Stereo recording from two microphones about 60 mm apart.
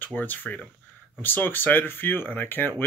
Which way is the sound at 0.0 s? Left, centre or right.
Left.